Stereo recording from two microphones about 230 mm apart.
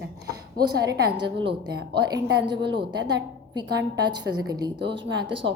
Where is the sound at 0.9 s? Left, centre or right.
Right.